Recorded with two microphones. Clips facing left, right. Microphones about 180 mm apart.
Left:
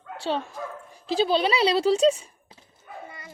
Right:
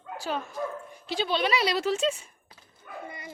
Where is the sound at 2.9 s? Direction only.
60° right (ahead or behind).